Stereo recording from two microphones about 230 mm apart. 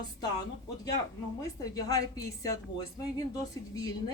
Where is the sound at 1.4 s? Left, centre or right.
Centre.